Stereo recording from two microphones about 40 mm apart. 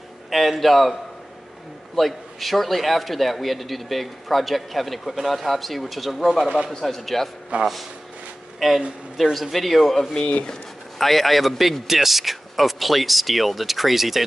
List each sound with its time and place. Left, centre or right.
0.3 s speech: centre
2.0 s a man's voice: centre
7.5 s speech: right
8.5 s speech: centre
10.4 s a sound: centre
11.1 s speech: centre